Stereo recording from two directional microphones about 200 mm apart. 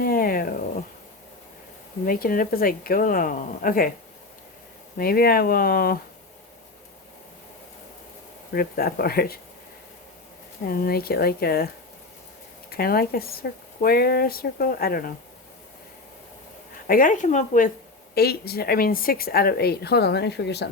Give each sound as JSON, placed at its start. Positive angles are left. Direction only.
{"t": 0.0, "sound": "cat", "side_deg": 45}
{"t": 2.0, "sound": "speech", "side_deg": 45}
{"t": 4.9, "sound": "speech", "side_deg": 50}
{"t": 8.5, "sound": "speech", "side_deg": 50}
{"t": 10.7, "sound": "speech", "side_deg": 50}
{"t": 12.7, "sound": "speech", "side_deg": 50}
{"t": 16.8, "sound": "speech", "side_deg": 45}
{"t": 18.1, "sound": "speech", "side_deg": 50}